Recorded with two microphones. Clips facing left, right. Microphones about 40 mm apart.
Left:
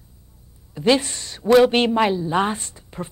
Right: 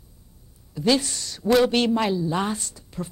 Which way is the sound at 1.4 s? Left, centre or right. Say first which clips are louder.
Left 5 dB; centre.